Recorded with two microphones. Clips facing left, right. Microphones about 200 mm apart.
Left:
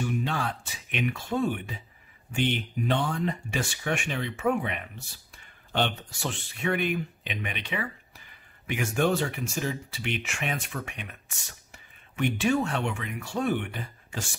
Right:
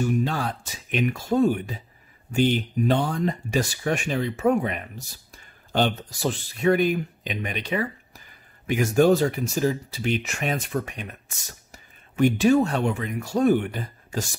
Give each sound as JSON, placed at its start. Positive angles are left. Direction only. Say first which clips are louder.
{"t": 0.0, "sound": "speech", "louder": "right 5 dB", "side_deg": -40}